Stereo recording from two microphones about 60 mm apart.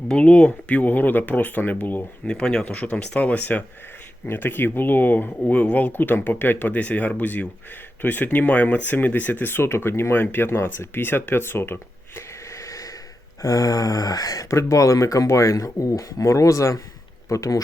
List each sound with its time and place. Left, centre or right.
0.1 s speech: centre
2.2 s speech: centre
4.3 s speech: left
12.5 s a sound: left
13.4 s speech: left